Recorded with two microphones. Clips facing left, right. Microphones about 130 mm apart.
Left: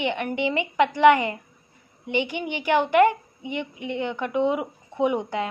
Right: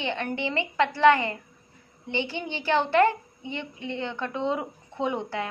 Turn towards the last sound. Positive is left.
turn(degrees=15)  # may be behind; listen again after turning